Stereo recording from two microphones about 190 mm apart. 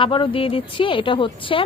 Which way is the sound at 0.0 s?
25° left (ahead or behind).